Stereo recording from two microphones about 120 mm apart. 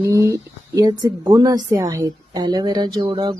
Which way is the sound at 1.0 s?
35° right (ahead or behind).